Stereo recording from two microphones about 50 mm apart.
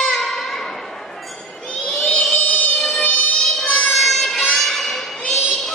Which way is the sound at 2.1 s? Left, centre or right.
Centre.